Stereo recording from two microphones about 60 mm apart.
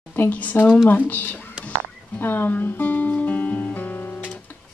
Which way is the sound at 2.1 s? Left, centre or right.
Left.